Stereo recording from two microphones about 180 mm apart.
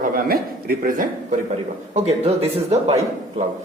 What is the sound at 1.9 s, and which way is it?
Speech, 35° right (ahead or behind).